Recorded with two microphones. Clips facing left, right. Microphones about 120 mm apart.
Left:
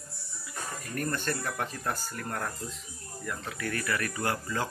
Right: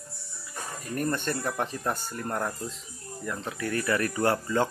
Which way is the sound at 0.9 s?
20° right (ahead or behind).